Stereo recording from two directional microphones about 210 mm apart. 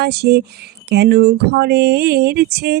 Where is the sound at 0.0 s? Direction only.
50° right (ahead or behind).